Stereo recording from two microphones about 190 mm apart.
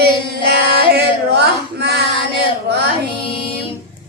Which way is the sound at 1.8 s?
60° right (ahead or behind).